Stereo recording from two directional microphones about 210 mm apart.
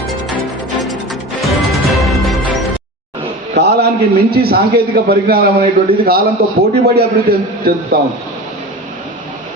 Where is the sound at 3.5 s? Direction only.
50° right (ahead or behind).